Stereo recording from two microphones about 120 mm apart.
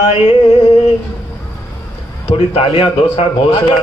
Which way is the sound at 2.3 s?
50° left (ahead or behind).